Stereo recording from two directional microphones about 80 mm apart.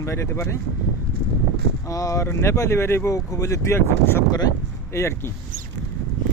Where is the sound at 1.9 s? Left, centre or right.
Left.